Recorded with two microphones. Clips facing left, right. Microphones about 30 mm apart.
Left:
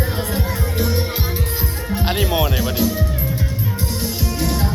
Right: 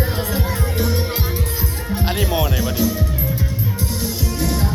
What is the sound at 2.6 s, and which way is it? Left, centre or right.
Music, left.